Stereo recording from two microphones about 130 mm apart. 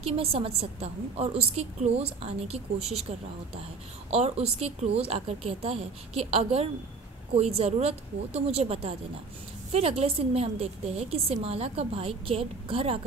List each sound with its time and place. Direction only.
0.0 s a woman's voice: 50° right (ahead or behind)